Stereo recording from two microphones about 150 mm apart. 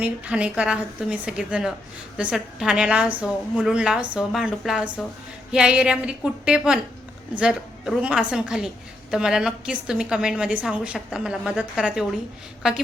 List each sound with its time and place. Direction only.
0.0 s a woman's voice: 10° right (ahead or behind)